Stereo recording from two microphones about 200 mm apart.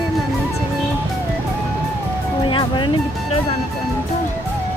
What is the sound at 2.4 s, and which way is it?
Music, 25° left (ahead or behind).